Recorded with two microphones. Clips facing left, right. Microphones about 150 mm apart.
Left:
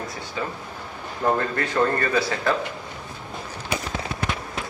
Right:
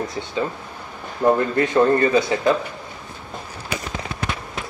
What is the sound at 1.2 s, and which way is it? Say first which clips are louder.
Speech: right 6 dB; 20° right (ahead or behind).